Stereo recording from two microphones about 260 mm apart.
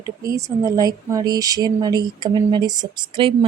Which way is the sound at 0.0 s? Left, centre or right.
Centre.